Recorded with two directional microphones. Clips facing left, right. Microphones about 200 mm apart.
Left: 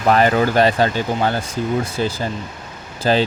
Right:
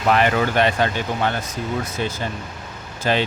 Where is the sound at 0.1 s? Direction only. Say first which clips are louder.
Left 3 dB; 35° left (ahead or behind).